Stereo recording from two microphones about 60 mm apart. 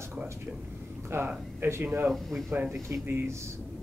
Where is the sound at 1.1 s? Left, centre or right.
Right.